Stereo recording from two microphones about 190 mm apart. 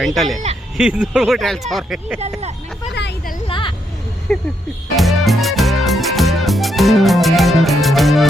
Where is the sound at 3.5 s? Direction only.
25° left (ahead or behind).